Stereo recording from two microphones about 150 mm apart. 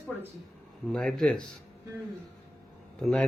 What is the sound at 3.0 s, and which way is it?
Speech, 5° left (ahead or behind).